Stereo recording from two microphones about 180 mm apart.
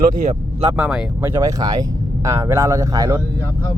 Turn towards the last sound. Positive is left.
turn(degrees=-20)  # may be behind; listen again after turning